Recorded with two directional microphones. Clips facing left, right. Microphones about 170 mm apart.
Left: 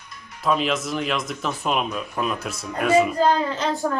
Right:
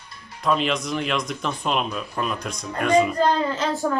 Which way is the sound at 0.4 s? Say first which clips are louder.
Even; 5° left (ahead or behind).